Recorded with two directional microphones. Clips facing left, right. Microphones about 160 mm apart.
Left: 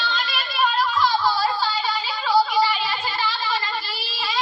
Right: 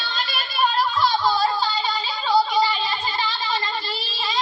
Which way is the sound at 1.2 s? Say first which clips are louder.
Right 1 dB; 20° right (ahead or behind).